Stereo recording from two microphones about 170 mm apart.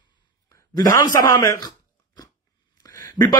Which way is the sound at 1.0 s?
20° left (ahead or behind).